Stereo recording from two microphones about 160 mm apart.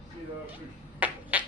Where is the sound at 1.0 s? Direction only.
10° right (ahead or behind).